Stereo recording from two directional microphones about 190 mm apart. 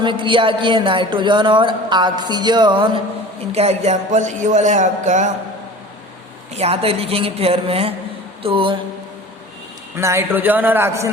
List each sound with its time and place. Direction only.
0.0 s speech: 25° right (ahead or behind)
3.5 s music: 35° right (ahead or behind)
6.5 s music: 30° right (ahead or behind)
8.4 s speech: 25° right (ahead or behind)
9.9 s a man's voice: 15° right (ahead or behind)